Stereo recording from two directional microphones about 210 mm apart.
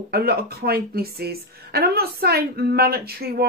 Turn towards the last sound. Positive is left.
turn(degrees=-50)  # may be behind; listen again after turning